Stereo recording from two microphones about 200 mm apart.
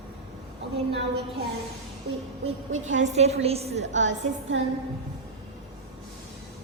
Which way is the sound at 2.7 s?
75° right (ahead or behind).